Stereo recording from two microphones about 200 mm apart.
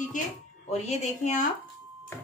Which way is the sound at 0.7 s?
35° left (ahead or behind).